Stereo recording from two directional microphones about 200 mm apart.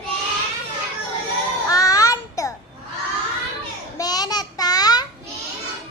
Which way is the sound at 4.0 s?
20° left (ahead or behind).